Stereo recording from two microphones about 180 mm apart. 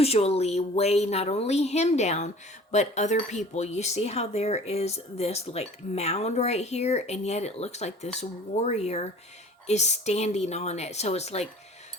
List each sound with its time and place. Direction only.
0.0 s speech: 35° left (ahead or behind)